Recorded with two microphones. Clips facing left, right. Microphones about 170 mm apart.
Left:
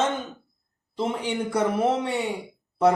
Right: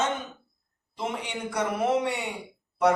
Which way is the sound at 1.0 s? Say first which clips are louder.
Left 6 dB; 30° left (ahead or behind).